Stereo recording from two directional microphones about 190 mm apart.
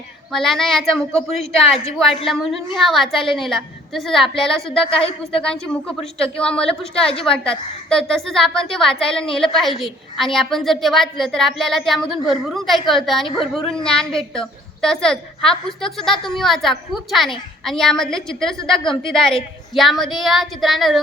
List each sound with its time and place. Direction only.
0.3 s a woman's voice: centre (ahead or behind)
4.8 s a woman's voice: 30° left (ahead or behind)
5.4 s a woman's voice: 5° left (ahead or behind)